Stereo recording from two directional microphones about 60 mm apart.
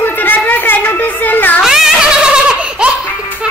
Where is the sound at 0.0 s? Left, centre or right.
Left.